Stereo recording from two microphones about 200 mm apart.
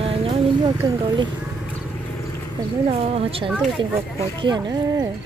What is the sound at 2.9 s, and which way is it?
Speech, 30° right (ahead or behind).